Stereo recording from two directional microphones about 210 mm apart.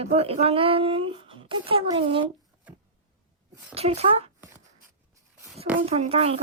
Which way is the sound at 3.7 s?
30° right (ahead or behind).